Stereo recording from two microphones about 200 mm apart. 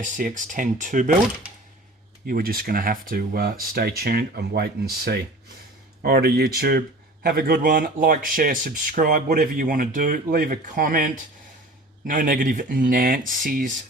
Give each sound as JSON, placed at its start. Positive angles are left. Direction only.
{"t": 0.0, "sound": "speech", "side_deg": -40}
{"t": 2.2, "sound": "speech", "side_deg": -50}